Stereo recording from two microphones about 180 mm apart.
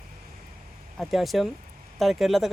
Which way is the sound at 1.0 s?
Centre (ahead or behind).